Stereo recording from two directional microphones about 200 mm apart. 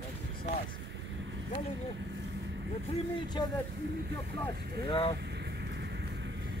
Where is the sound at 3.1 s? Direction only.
20° left (ahead or behind).